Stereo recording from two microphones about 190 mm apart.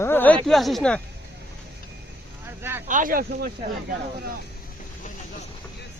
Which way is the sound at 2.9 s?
45° right (ahead or behind).